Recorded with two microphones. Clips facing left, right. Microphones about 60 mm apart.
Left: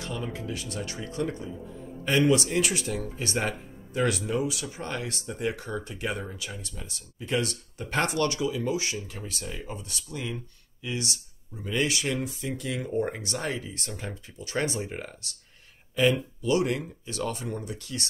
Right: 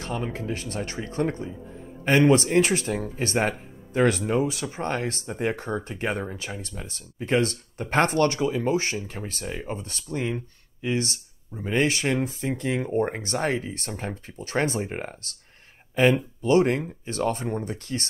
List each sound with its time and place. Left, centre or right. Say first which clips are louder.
0.0 s speech: right 4 dB; right
16.4 s speech: right 5 dB; right